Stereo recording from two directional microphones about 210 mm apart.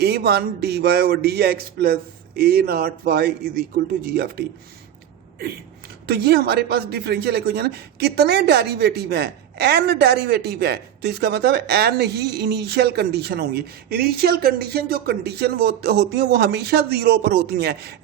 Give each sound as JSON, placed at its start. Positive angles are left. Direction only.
{"t": 0.0, "sound": "speech", "side_deg": -50}
{"t": 6.1, "sound": "speech", "side_deg": -50}